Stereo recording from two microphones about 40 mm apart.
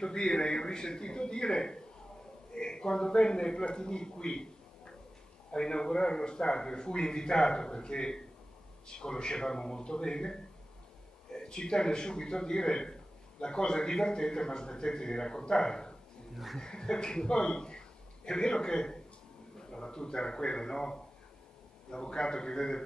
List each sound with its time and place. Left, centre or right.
0.0 s a man's voice: centre